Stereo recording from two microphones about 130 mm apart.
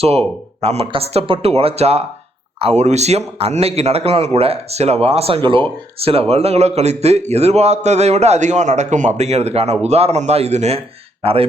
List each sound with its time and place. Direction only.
0.0 s a man's voice: 50° right (ahead or behind)